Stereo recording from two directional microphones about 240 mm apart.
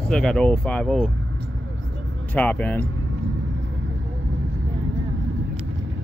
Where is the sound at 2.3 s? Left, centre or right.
Centre.